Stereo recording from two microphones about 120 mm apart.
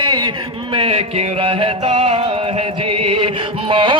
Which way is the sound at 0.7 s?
55° right (ahead or behind).